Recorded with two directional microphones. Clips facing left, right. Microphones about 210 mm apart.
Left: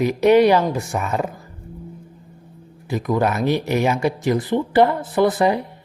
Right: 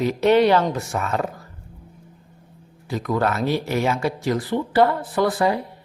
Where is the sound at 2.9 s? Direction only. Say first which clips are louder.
Left 2 dB; 15° left (ahead or behind).